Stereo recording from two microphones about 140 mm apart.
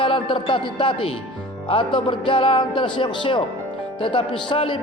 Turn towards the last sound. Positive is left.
turn(degrees=35)  # may be behind; listen again after turning